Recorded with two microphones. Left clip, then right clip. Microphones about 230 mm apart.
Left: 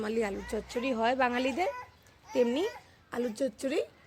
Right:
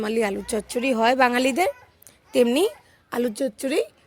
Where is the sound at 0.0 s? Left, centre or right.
Right.